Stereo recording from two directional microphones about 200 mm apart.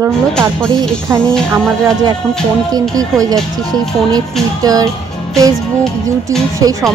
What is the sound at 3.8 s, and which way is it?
Speech, centre (ahead or behind).